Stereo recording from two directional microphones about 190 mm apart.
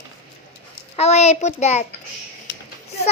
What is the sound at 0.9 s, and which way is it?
Speech, 35° left (ahead or behind).